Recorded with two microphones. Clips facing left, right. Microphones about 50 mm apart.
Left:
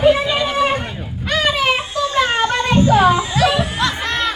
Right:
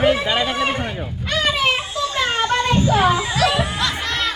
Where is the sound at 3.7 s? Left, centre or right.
Left.